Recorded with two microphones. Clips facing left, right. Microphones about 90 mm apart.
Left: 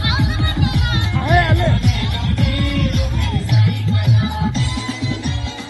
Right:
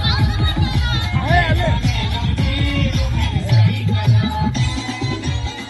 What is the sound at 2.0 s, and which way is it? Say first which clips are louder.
Music: even; 30° right (ahead or behind).